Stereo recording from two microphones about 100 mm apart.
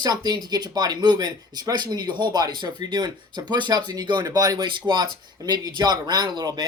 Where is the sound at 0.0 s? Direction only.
40° right (ahead or behind).